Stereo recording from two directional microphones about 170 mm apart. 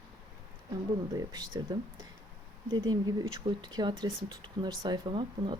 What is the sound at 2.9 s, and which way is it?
Speech, 25° right (ahead or behind).